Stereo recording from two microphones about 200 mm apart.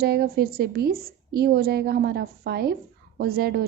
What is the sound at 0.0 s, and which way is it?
A woman's voice, 50° right (ahead or behind).